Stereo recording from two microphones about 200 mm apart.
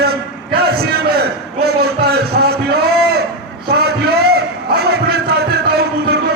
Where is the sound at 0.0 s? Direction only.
50° right (ahead or behind).